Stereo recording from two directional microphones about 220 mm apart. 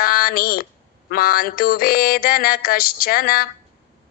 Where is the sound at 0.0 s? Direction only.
40° left (ahead or behind).